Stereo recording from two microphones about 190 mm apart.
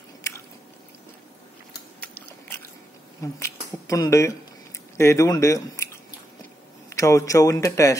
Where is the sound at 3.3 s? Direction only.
15° left (ahead or behind).